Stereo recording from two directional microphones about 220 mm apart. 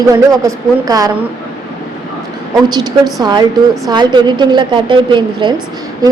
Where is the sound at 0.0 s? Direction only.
15° right (ahead or behind).